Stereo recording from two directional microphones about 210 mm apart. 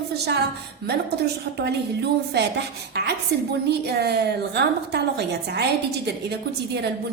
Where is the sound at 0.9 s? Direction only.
50° right (ahead or behind).